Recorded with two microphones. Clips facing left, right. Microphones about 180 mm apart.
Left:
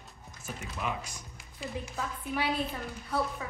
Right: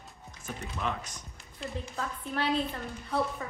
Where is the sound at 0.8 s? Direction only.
10° left (ahead or behind).